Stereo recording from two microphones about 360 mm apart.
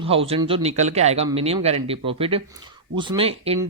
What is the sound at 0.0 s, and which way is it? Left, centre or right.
Speech, centre.